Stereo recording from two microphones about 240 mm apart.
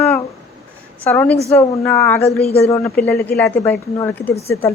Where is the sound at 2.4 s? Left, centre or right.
Left.